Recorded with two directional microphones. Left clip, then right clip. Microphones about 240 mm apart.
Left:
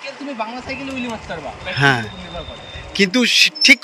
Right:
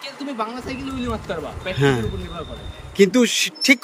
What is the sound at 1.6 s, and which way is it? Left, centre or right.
Speech, centre.